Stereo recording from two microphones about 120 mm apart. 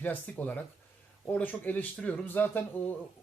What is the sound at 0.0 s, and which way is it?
Speech, 15° left (ahead or behind).